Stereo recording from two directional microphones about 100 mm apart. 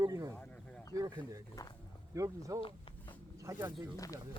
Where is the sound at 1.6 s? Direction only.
35° left (ahead or behind).